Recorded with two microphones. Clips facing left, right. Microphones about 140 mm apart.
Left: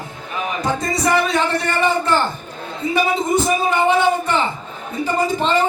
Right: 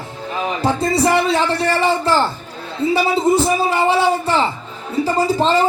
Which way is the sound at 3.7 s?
35° right (ahead or behind).